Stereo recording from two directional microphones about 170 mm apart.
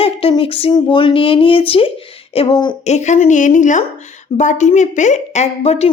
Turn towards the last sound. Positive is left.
turn(degrees=40)  # may be behind; listen again after turning